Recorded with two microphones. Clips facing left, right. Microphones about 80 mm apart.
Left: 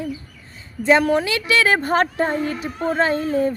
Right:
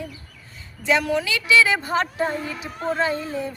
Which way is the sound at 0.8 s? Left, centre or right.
Left.